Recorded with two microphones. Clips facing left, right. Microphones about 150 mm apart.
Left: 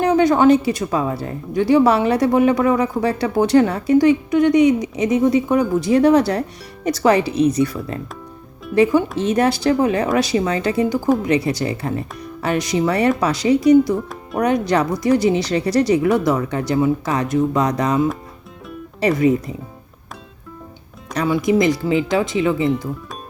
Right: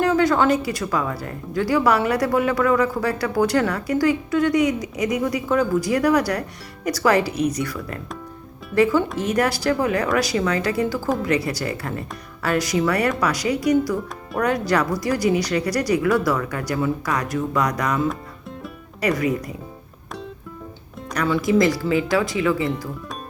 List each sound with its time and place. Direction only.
0.0 s speech: 20° left (ahead or behind)
21.1 s speech: 20° left (ahead or behind)